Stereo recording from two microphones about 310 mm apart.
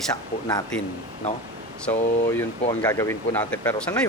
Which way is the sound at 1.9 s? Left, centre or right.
Centre.